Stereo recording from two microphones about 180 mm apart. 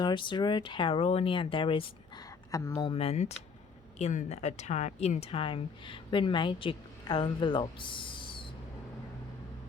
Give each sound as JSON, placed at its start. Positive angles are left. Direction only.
{"t": 0.0, "sound": "speech", "side_deg": 25}
{"t": 2.5, "sound": "speech", "side_deg": 20}
{"t": 2.9, "sound": "speech", "side_deg": 35}